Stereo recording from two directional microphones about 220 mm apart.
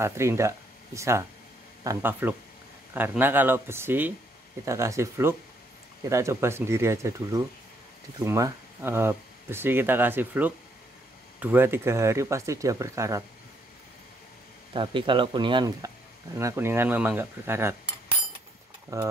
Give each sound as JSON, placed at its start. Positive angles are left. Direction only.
{"t": 0.0, "sound": "speech", "side_deg": -10}
{"t": 14.7, "sound": "speech", "side_deg": -20}
{"t": 18.9, "sound": "speech", "side_deg": -15}